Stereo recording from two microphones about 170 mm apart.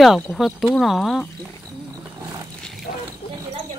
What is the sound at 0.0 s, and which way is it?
Speech, centre (ahead or behind).